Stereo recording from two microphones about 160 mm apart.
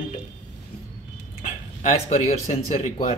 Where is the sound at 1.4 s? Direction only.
50° left (ahead or behind).